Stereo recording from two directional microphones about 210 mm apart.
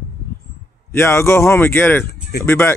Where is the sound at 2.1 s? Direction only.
50° left (ahead or behind).